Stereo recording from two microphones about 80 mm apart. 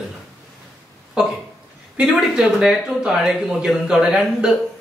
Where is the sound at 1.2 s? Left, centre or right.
Centre.